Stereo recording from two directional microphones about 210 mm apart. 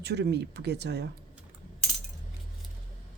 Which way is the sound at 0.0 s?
50° right (ahead or behind).